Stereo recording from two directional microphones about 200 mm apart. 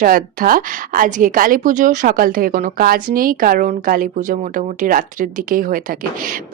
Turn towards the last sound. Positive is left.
turn(degrees=-45)  # may be behind; listen again after turning